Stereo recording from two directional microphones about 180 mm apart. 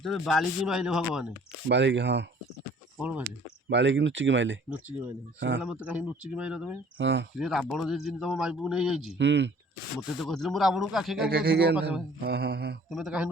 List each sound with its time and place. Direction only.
0.0 s speech: centre (ahead or behind)
1.7 s speech: 85° right
3.0 s speech: 10° right (ahead or behind)
3.2 s speech: 85° right
5.6 s speech: 5° right (ahead or behind)
7.0 s speech: 85° right
7.3 s speech: centre (ahead or behind)
9.1 s speech: 80° right
10.2 s speech: centre (ahead or behind)
11.3 s mantra: 65° right (ahead or behind)
11.8 s speech: 5° right (ahead or behind)
12.2 s mantra: 65° right (ahead or behind)
12.9 s speech: centre (ahead or behind)